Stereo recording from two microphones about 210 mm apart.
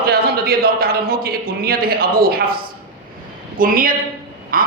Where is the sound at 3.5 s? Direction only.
40° right (ahead or behind).